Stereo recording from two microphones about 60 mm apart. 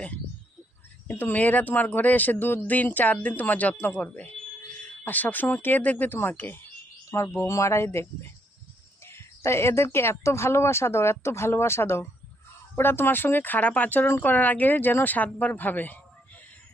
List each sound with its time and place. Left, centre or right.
1.0 s speech: left
7.1 s speech: left